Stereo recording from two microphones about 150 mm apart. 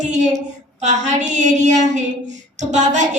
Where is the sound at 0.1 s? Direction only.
50° right (ahead or behind).